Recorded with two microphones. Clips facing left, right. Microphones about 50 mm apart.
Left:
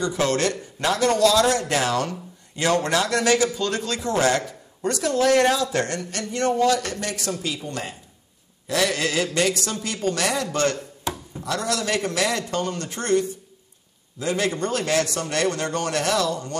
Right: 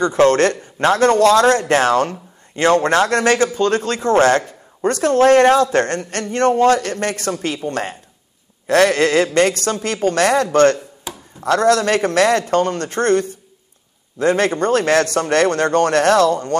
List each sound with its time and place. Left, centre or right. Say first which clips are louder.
0.0 s a man's voice: right 9 dB; right